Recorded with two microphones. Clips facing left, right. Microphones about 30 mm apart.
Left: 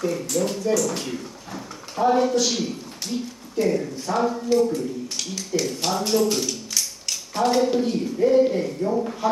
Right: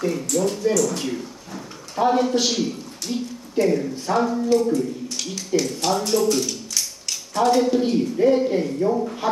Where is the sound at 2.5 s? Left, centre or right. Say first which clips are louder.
Right 2 dB; centre.